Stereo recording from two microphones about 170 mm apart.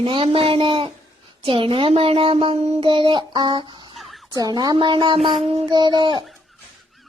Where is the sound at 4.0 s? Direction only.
Centre (ahead or behind).